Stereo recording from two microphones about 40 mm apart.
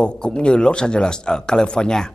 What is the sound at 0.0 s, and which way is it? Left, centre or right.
Speech, left.